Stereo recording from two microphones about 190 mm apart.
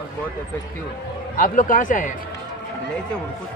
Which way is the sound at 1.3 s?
45° left (ahead or behind).